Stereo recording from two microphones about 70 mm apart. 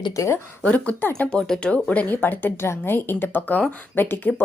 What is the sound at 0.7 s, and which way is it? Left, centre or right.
A woman's voice, left.